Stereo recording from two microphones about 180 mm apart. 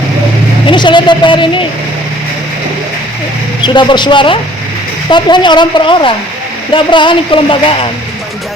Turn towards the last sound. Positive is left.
turn(degrees=30)  # may be behind; listen again after turning